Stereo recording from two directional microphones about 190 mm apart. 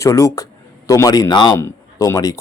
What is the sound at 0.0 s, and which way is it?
A man's voice, 15° left (ahead or behind).